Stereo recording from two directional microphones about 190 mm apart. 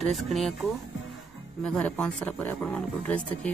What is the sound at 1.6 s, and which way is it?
Speech, 5° left (ahead or behind).